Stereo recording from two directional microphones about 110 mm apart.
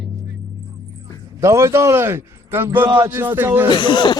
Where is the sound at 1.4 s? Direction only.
25° right (ahead or behind).